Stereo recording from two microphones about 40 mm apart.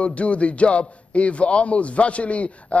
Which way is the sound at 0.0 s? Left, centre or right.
Left.